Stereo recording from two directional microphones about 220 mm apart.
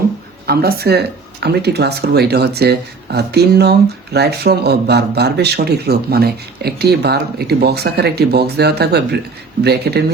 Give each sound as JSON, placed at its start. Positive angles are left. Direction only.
{"t": 0.4, "sound": "speech", "side_deg": -45}